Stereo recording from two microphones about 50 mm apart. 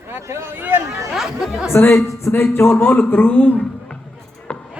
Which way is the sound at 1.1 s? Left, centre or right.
Centre.